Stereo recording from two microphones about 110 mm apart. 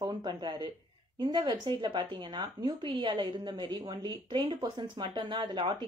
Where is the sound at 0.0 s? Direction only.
45° right (ahead or behind).